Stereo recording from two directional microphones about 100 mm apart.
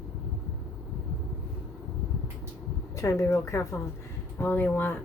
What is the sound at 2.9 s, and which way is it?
Speech, 30° left (ahead or behind).